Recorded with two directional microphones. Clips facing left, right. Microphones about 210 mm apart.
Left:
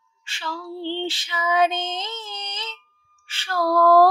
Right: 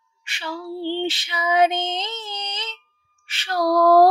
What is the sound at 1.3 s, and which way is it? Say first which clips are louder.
Female singing: right 2 dB; 15° right (ahead or behind).